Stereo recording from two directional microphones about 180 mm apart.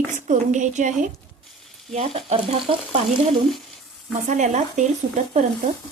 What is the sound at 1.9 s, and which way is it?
Speech, 35° right (ahead or behind).